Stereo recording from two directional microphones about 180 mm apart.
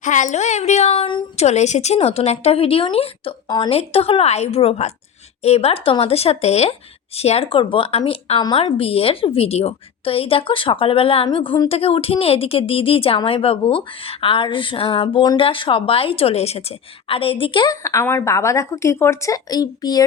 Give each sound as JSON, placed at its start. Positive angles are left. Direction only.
{"t": 0.0, "sound": "a woman's voice", "side_deg": 45}